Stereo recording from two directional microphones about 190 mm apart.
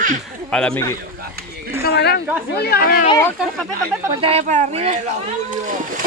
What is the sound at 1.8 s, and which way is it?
A woman's voice, 55° left (ahead or behind).